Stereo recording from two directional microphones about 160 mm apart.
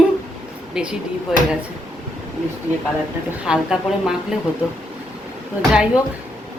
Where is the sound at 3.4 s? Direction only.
5° right (ahead or behind).